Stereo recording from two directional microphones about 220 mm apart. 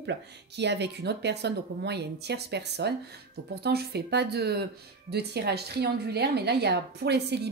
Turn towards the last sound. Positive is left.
turn(degrees=-50)  # may be behind; listen again after turning